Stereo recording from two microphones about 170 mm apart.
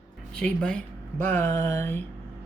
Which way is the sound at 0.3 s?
5° left (ahead or behind).